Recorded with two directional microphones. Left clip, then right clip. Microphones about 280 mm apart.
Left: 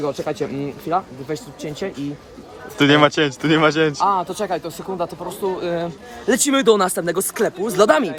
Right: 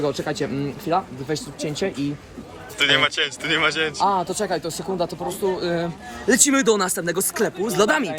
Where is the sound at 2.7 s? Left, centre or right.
Left.